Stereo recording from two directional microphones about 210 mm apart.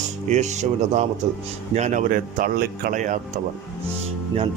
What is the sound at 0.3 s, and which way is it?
Speech, 35° right (ahead or behind).